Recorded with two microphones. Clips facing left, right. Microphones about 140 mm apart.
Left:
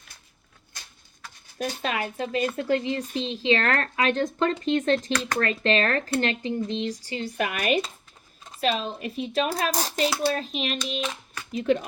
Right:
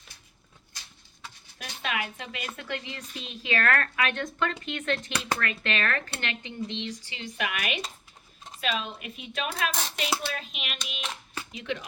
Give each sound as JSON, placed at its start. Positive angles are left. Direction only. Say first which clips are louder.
{"t": 1.5, "sound": "speech", "louder": "left 5 dB", "side_deg": 40}
{"t": 11.5, "sound": "speech", "louder": "left 11 dB", "side_deg": 45}